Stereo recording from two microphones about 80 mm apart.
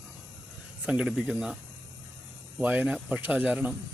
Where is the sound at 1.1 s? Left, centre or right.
Centre.